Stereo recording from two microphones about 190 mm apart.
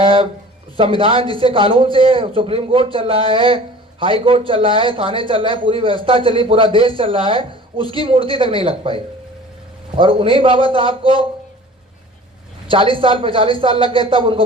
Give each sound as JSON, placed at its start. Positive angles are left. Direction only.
{"t": 0.0, "sound": "a sound", "side_deg": -30}
{"t": 0.8, "sound": "a man's voice", "side_deg": -30}
{"t": 12.6, "sound": "a man's voice", "side_deg": -25}